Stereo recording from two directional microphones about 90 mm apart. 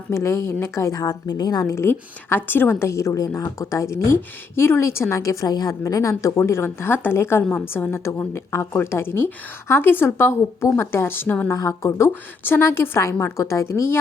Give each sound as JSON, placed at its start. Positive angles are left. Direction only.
{"t": 0.1, "sound": "a woman's voice", "side_deg": 30}
{"t": 5.8, "sound": "a woman's voice", "side_deg": 35}
{"t": 11.5, "sound": "a woman's voice", "side_deg": 35}